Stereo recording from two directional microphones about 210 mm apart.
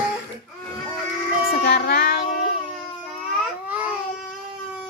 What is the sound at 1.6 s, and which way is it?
Child singing, 50° left (ahead or behind).